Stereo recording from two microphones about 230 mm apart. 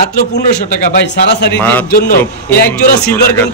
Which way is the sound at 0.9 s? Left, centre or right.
Left.